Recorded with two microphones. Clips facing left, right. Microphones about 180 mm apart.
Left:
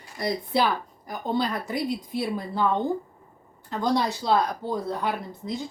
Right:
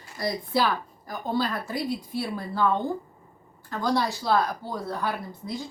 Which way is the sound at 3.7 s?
20° left (ahead or behind).